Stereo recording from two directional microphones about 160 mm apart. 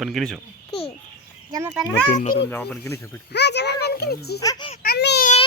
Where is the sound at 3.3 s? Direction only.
90° left.